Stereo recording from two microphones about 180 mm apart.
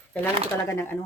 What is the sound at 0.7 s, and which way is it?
Speech, 10° left (ahead or behind).